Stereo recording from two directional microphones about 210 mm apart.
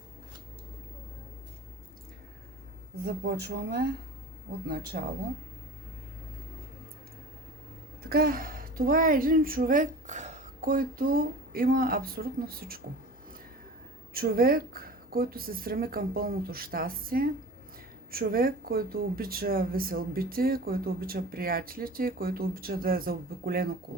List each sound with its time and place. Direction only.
3.0 s speech: 50° right (ahead or behind)
8.1 s speech: 45° right (ahead or behind)
14.1 s speech: 45° right (ahead or behind)